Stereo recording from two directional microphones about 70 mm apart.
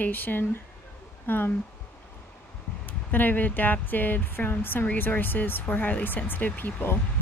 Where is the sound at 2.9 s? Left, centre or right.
Left.